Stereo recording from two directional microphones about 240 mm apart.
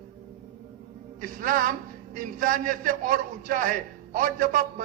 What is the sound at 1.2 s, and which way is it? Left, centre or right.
A man's voice, right.